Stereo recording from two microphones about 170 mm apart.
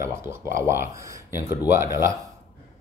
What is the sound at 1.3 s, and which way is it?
Speech, 15° right (ahead or behind).